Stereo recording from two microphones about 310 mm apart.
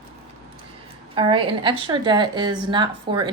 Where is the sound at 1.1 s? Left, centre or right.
Centre.